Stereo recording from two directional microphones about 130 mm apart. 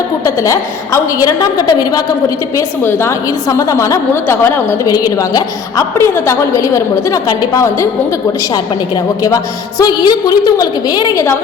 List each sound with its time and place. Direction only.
0.3 s a woman's voice: 25° left (ahead or behind)
9.2 s a woman's voice: 25° left (ahead or behind)